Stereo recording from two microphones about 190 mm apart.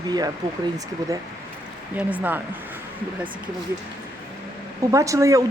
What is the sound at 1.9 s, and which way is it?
Speech, 10° right (ahead or behind).